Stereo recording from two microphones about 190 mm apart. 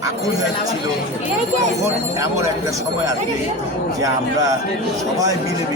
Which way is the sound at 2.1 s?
15° right (ahead or behind).